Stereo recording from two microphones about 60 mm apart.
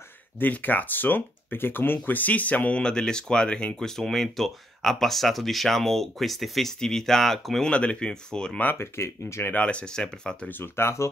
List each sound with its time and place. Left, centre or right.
0.4 s speech: left
2.8 s speech: centre
7.7 s speech: centre
8.7 s speech: left
9.6 s speech: centre
10.5 s speech: left